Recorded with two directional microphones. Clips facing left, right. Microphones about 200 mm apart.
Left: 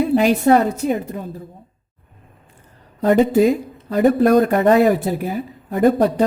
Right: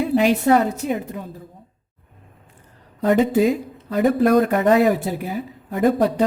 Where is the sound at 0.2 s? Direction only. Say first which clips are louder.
Even; 40° left (ahead or behind).